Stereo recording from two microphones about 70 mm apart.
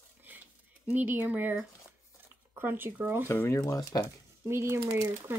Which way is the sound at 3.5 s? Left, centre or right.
Left.